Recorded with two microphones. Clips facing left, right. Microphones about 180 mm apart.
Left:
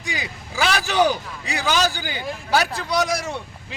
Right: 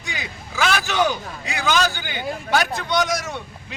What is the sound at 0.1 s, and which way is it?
A man's voice, 35° left (ahead or behind).